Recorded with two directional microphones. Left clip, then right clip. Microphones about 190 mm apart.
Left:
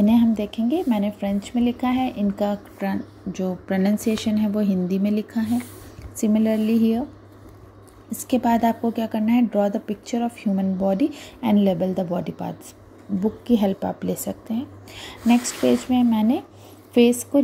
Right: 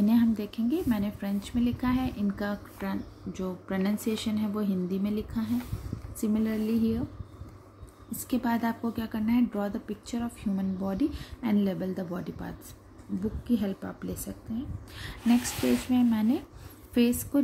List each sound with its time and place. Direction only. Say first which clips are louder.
0.3 s speech: left 7 dB; 10° left (ahead or behind)
8.1 s speech: left 10 dB; 15° left (ahead or behind)